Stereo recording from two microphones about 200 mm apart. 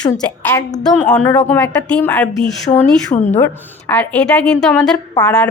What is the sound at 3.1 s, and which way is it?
Speech, 35° left (ahead or behind).